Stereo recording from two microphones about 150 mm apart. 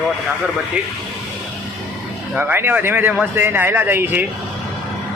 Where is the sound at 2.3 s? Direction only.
15° right (ahead or behind).